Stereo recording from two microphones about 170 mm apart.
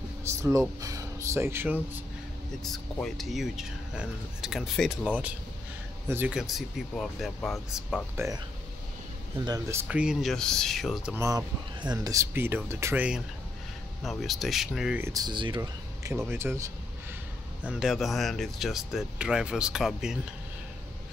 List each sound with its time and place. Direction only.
0.3 s speech: 20° right (ahead or behind)
2.6 s speech: centre (ahead or behind)
6.0 s speech: 10° right (ahead or behind)
8.2 s speech: 15° right (ahead or behind)
9.4 s speech: 20° right (ahead or behind); by 11.1 s centre (ahead or behind)
11.1 s speech: 20° right (ahead or behind)
15.0 s speech: 25° right (ahead or behind)
17.6 s speech: 5° right (ahead or behind)